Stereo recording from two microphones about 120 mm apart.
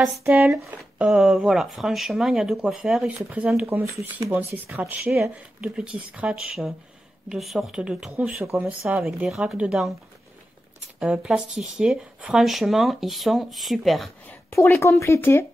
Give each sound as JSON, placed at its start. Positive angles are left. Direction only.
{"t": 0.0, "sound": "speech", "side_deg": -15}
{"t": 8.4, "sound": "speech", "side_deg": -20}
{"t": 8.8, "sound": "speech", "side_deg": -5}
{"t": 11.0, "sound": "speech", "side_deg": -5}
{"t": 14.5, "sound": "speech", "side_deg": 20}